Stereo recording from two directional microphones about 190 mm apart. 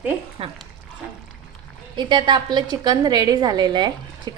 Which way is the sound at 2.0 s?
25° right (ahead or behind).